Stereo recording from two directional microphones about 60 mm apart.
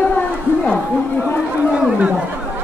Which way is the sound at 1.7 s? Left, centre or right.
Centre.